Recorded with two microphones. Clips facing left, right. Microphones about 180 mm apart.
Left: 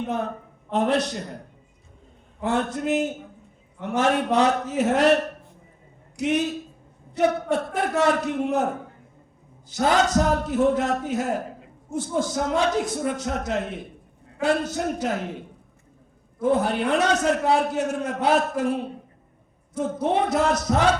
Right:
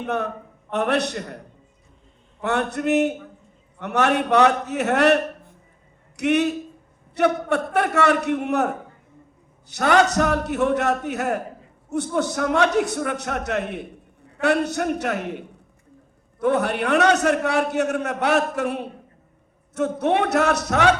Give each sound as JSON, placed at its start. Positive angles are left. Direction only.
{"t": 0.7, "sound": "a man's voice", "side_deg": -70}
{"t": 2.4, "sound": "a man's voice", "side_deg": -70}
{"t": 9.6, "sound": "a man's voice", "side_deg": -70}